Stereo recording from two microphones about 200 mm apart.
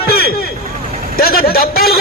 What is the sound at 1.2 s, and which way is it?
Speech, 50° left (ahead or behind).